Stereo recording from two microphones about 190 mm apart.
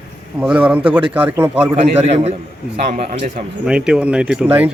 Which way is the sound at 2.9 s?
45° right (ahead or behind).